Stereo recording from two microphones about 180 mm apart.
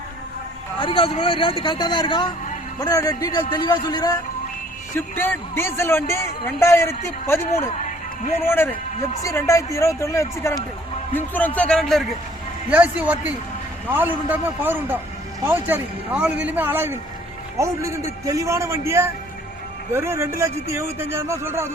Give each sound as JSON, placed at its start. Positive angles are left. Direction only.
{"t": 0.8, "sound": "speech", "side_deg": 30}
{"t": 4.9, "sound": "speech", "side_deg": 10}
{"t": 7.8, "sound": "a sound", "side_deg": 45}
{"t": 8.4, "sound": "speech", "side_deg": 10}
{"t": 12.7, "sound": "speech", "side_deg": -10}